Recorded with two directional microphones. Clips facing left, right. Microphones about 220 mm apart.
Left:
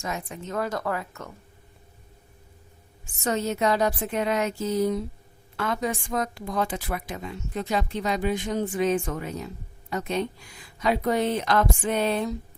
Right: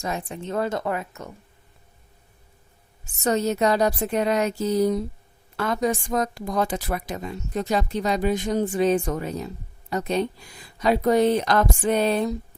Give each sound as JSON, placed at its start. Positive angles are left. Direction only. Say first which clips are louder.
{"t": 0.0, "sound": "speech", "louder": "right 3 dB", "side_deg": -30}
{"t": 3.2, "sound": "a woman's voice", "louder": "right 3 dB", "side_deg": -40}